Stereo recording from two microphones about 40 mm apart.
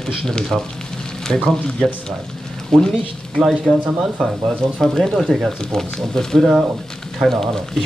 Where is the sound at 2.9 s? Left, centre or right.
Centre.